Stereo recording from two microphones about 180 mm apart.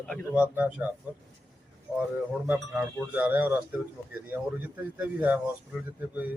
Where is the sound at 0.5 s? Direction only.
10° right (ahead or behind).